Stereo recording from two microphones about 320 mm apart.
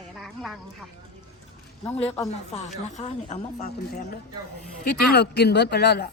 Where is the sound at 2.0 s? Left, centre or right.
Centre.